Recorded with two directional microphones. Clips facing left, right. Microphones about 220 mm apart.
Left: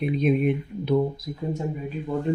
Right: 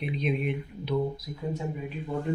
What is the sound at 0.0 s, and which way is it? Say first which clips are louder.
Speech: left 8 dB; 45° left (ahead or behind).